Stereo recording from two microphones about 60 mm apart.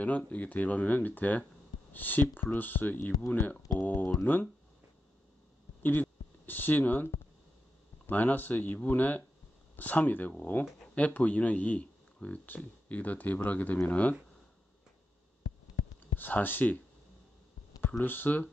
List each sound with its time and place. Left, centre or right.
0.0 s speech: left
5.8 s speech: left
8.1 s speech: left
16.2 s speech: left
18.0 s speech: left